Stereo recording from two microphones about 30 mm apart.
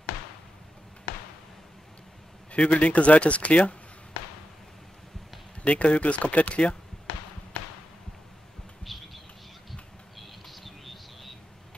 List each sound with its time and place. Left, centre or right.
2.5 s speech: left
5.6 s speech: left
8.8 s insect: centre
9.7 s a sound: centre